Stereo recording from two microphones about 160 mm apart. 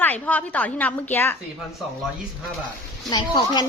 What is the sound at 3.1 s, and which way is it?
Speech, 25° left (ahead or behind).